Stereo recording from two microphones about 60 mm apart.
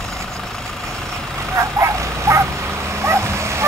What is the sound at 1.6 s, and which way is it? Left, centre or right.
Bow-wow, right.